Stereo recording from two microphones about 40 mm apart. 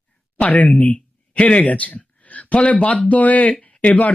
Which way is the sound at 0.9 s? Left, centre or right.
Left.